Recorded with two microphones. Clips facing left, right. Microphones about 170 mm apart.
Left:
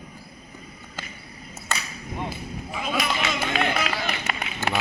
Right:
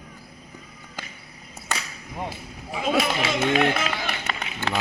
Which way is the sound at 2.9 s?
30° right (ahead or behind).